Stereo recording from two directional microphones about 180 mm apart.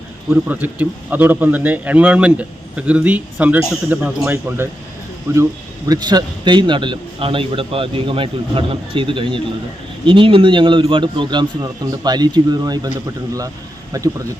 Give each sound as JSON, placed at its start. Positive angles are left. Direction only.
{"t": 0.3, "sound": "a man's voice", "side_deg": -10}